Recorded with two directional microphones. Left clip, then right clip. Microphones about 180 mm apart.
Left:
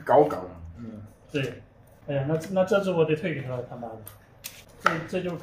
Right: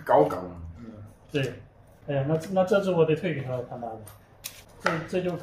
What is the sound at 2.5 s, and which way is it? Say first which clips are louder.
Speech: even; 15° right (ahead or behind).